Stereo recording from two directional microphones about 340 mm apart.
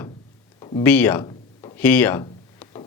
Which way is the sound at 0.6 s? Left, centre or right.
Centre.